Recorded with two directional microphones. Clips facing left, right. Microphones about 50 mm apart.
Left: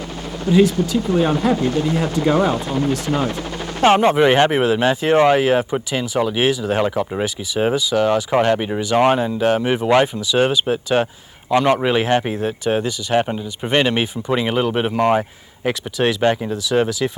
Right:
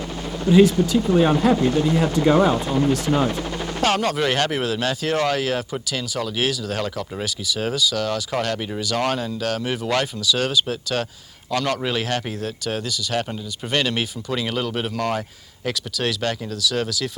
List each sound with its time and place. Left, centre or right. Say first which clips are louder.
3.8 s speech: left 8 dB; left